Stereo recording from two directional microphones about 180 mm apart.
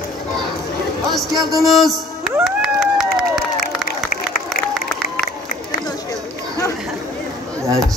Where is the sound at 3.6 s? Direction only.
55° left (ahead or behind).